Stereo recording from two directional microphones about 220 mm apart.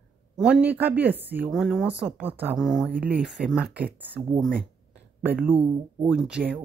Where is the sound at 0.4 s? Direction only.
5° right (ahead or behind).